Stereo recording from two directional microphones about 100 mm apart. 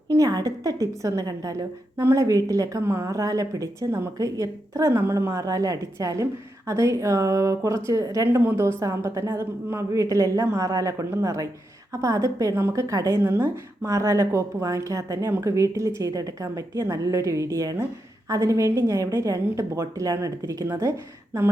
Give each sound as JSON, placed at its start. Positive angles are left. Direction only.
{"t": 0.1, "sound": "a woman's voice", "side_deg": -40}